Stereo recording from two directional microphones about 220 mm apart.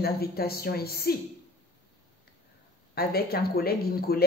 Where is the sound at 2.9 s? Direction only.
45° left (ahead or behind).